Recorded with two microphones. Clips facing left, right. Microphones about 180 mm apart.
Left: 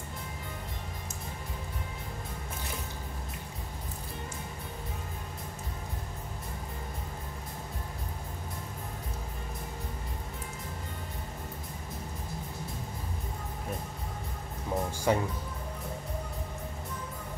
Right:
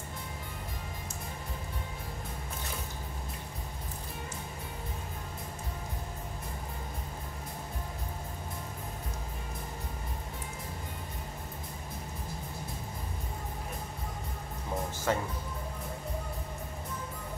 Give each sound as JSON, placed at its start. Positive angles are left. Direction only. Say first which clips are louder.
{"t": 15.1, "sound": "speech", "louder": "left 3 dB", "side_deg": 15}